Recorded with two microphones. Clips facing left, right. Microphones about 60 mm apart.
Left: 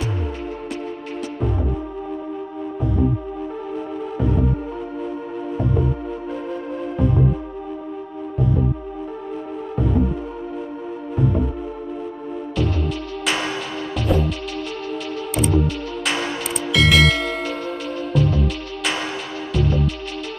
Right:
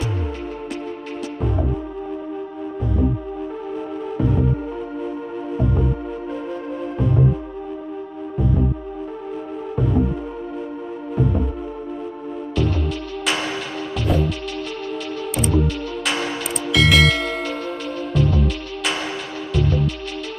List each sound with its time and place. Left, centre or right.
12.6 s music: centre
16.7 s bell: centre